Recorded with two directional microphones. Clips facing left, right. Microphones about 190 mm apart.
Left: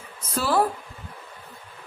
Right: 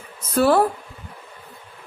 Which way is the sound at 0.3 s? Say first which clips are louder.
Right 7 dB; 60° right (ahead or behind).